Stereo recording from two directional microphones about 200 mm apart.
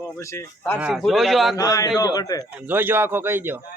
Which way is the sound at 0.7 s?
5° right (ahead or behind).